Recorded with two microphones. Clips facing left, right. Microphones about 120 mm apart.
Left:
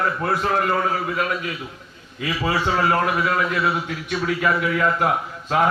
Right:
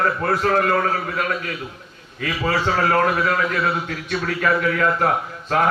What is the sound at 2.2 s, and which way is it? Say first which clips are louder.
A man's voice: right 1 dB; 10° left (ahead or behind).